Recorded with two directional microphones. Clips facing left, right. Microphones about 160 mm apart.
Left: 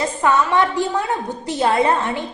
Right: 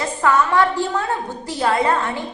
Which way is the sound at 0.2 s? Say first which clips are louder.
Right 1 dB; 20° left (ahead or behind).